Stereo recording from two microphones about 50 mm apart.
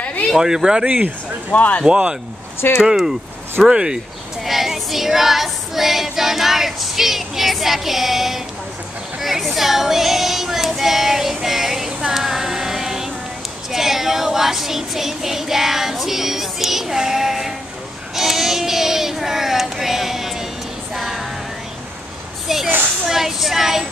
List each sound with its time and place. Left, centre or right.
0.4 s child singing: centre
1.5 s speech: left
1.9 s speech: centre
2.8 s child singing: centre
4.5 s female singing: centre
12.0 s a sound: centre
13.7 s child singing: centre
20.9 s music: centre
22.5 s female singing: centre
23.0 s child singing: centre